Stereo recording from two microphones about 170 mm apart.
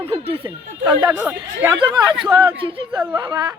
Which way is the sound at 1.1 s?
10° right (ahead or behind).